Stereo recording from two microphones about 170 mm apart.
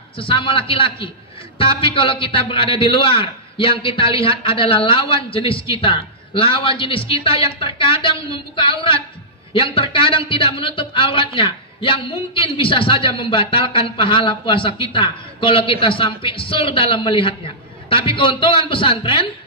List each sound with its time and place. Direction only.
0.2 s a man's voice: 30° left (ahead or behind)